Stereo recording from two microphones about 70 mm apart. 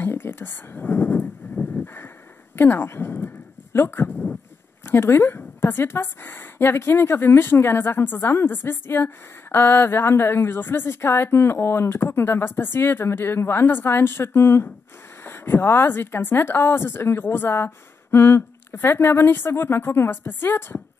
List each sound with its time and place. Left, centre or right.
0.0 s speech: left
1.8 s a sound: left
2.5 s a woman's voice: left